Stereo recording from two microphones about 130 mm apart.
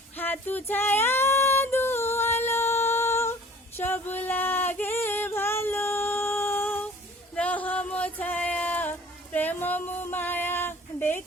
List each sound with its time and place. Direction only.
0.2 s female singing: 15° left (ahead or behind)
7.3 s music: 10° left (ahead or behind)